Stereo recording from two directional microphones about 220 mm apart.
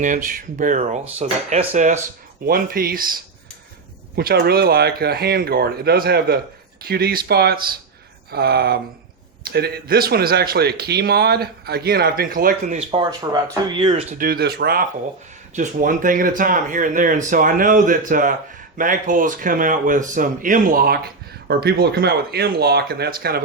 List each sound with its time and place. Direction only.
0.0 s speech: 35° right (ahead or behind)
4.1 s speech: 45° right (ahead or behind)
12.9 s speech: 20° right (ahead or behind)
14.2 s speech: 45° right (ahead or behind)